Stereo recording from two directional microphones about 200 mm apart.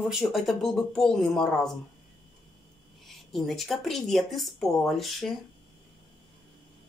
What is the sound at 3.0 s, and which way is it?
Speech, centre (ahead or behind).